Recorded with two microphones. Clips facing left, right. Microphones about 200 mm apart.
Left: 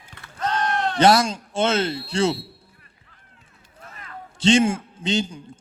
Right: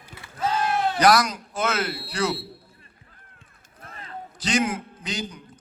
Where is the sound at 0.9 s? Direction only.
25° left (ahead or behind).